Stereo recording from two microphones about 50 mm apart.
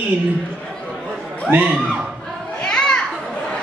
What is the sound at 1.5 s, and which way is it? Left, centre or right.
Speech, right.